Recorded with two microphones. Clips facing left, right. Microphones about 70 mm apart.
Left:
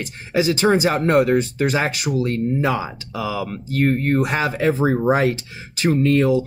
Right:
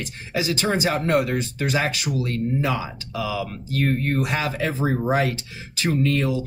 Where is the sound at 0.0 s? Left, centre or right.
Left.